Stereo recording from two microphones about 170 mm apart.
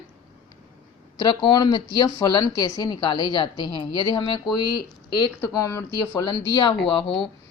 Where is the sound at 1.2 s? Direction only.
30° left (ahead or behind).